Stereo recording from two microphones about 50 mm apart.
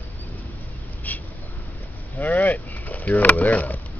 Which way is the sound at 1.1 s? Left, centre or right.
Left.